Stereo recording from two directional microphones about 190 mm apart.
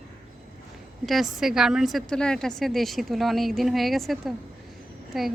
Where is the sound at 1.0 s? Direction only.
Centre (ahead or behind).